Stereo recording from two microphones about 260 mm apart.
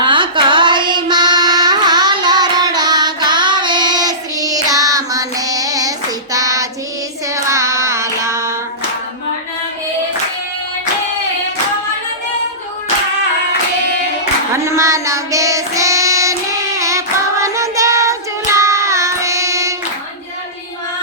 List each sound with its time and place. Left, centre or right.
0.0 s mantra: centre
6.3 s child singing: centre
14.5 s child singing: centre